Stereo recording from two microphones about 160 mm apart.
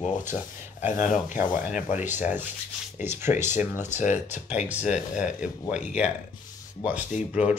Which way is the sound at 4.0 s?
50° left (ahead or behind).